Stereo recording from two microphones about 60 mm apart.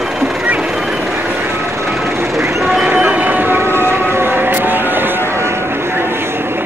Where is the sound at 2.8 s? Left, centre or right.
Right.